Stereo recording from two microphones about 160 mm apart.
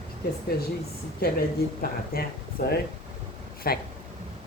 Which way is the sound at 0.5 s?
70° left (ahead or behind).